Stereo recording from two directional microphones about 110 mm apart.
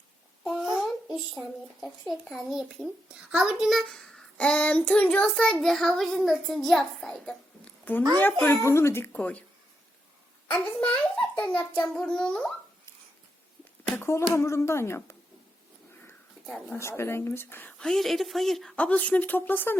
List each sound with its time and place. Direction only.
0.5 s a sound: 5° right (ahead or behind)
1.4 s a child's voice: centre (ahead or behind)
8.2 s speech: 20° left (ahead or behind)
10.5 s speech: 15° left (ahead or behind)
14.0 s speech: 25° left (ahead or behind)
16.6 s speech: 25° left (ahead or behind)